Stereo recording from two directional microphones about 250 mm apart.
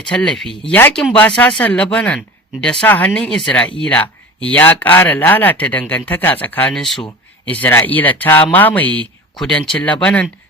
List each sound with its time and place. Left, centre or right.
0.1 s speech: centre